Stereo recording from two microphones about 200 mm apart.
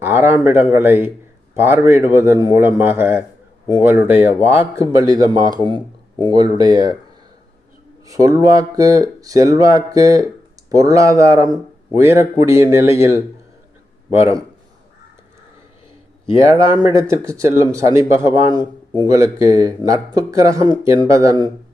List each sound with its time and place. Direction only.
0.0 s speech: 10° right (ahead or behind)
8.0 s speech: 15° right (ahead or behind)
16.3 s speech: 15° right (ahead or behind)